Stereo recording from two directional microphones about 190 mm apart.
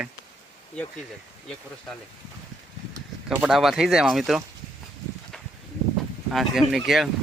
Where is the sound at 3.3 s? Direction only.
5° right (ahead or behind).